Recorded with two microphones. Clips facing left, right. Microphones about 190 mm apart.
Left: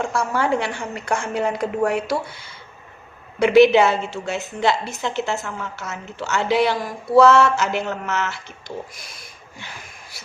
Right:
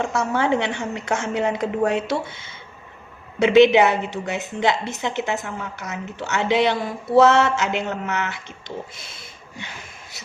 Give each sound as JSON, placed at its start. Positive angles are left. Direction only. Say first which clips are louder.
{"t": 0.1, "sound": "a woman's voice", "louder": "even", "side_deg": -20}
{"t": 3.3, "sound": "a woman's voice", "louder": "left 1 dB", "side_deg": -20}